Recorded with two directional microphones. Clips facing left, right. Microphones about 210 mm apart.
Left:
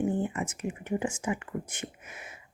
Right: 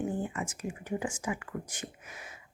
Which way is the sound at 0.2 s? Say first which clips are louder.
Left 4 dB; 25° left (ahead or behind).